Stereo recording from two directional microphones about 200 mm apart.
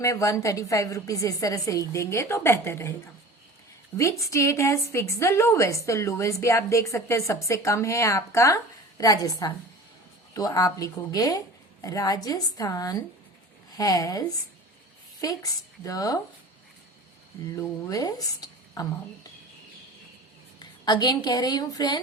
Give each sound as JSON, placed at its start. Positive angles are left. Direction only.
{"t": 0.0, "sound": "a woman's voice", "side_deg": 15}
{"t": 4.2, "sound": "a woman's voice", "side_deg": 15}
{"t": 17.5, "sound": "a woman's voice", "side_deg": 15}
{"t": 20.6, "sound": "a woman's voice", "side_deg": 20}